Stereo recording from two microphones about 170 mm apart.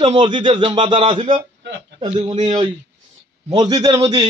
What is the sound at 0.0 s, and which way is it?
A man's voice, 30° right (ahead or behind).